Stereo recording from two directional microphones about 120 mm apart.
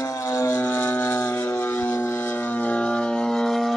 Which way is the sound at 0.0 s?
25° left (ahead or behind).